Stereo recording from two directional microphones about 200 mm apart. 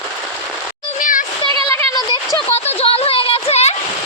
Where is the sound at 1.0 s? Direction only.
40° left (ahead or behind).